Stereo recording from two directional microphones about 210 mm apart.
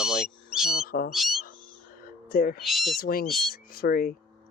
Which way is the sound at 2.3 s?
45° left (ahead or behind).